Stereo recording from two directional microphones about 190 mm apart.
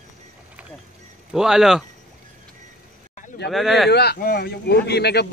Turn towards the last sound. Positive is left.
turn(degrees=60)  # may be behind; listen again after turning